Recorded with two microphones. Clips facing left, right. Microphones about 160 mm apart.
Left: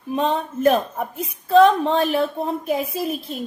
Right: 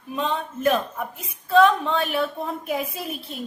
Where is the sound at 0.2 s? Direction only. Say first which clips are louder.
Left 5 dB; 40° left (ahead or behind).